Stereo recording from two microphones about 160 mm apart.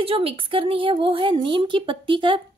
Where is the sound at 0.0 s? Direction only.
35° right (ahead or behind).